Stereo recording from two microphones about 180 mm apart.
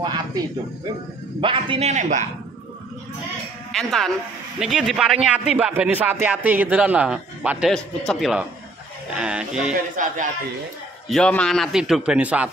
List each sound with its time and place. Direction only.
0.0 s a man's voice: 20° right (ahead or behind); by 2.2 s 40° right (ahead or behind)
3.7 s a man's voice: centre (ahead or behind)
9.9 s a man's voice: 45° right (ahead or behind)
11.1 s a man's voice: 5° left (ahead or behind)